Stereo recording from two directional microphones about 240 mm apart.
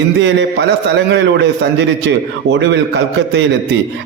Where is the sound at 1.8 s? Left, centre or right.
Right.